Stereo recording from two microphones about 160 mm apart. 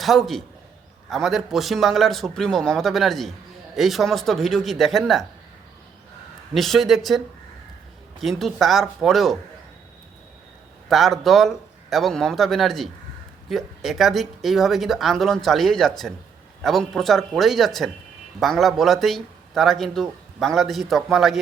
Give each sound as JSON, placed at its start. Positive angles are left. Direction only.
{"t": 0.0, "sound": "a man's voice", "side_deg": 0}
{"t": 6.5, "sound": "a man's voice", "side_deg": 0}
{"t": 8.2, "sound": "a man's voice", "side_deg": 0}
{"t": 10.8, "sound": "a man's voice", "side_deg": 0}